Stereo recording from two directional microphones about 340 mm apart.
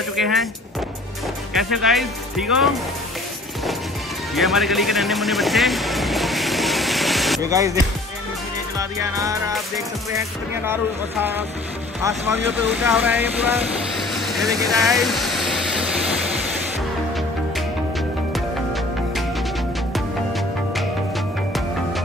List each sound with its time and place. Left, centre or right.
0.1 s speech: centre
1.5 s speech: centre
4.4 s music: centre
12.3 s speech: centre